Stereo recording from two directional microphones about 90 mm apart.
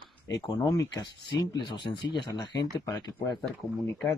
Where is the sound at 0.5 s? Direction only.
40° left (ahead or behind).